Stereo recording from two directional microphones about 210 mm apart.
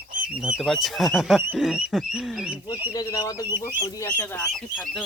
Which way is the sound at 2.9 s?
20° left (ahead or behind).